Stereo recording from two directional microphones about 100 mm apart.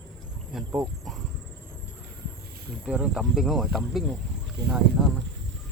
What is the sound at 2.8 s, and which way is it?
Speech, 10° right (ahead or behind).